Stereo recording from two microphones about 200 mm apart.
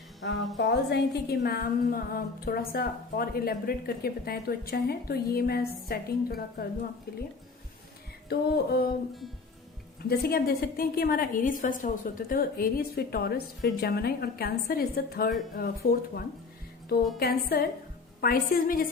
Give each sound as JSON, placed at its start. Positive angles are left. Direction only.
{"t": 0.5, "sound": "a woman's voice", "side_deg": 60}
{"t": 8.3, "sound": "a woman's voice", "side_deg": 50}
{"t": 10.1, "sound": "a woman's voice", "side_deg": 50}